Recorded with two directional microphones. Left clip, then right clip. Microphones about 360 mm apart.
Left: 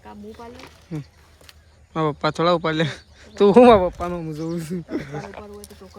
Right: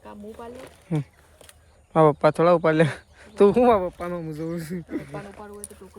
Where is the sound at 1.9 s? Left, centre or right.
Centre.